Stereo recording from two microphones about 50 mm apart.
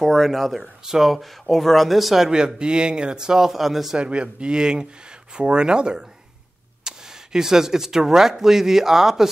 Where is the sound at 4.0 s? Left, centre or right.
Right.